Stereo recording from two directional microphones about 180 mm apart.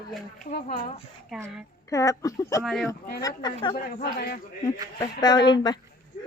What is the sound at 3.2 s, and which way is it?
Speech, 25° left (ahead or behind).